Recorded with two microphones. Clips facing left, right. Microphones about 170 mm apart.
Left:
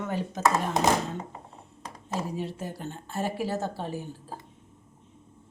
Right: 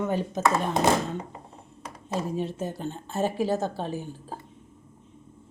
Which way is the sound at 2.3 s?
20° right (ahead or behind).